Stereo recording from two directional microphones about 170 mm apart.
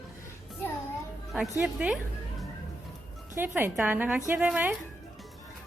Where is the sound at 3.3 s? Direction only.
10° right (ahead or behind).